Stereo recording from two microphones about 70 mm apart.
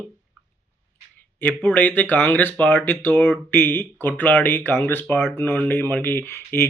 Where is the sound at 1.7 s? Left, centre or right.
Left.